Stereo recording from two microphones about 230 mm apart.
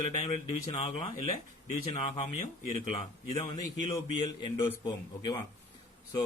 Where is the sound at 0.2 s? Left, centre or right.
Left.